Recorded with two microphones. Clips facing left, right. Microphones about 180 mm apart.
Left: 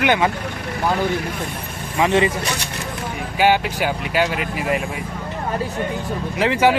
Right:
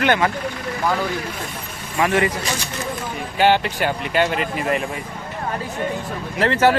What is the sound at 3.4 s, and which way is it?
Speech, 10° left (ahead or behind).